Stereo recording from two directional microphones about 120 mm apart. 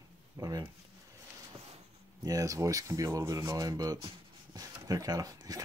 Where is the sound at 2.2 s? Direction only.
30° right (ahead or behind).